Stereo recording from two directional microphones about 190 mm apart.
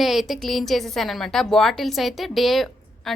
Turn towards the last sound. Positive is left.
turn(degrees=0)  # may be behind; listen again after turning